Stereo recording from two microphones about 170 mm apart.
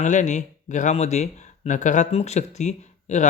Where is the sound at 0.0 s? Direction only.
45° left (ahead or behind).